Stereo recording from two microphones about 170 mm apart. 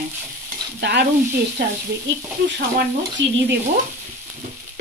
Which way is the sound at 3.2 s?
90° right.